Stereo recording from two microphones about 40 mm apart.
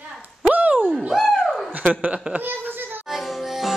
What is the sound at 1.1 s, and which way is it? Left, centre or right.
Speech, centre.